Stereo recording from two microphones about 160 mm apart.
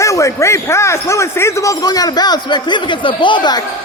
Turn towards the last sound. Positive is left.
turn(degrees=30)  # may be behind; listen again after turning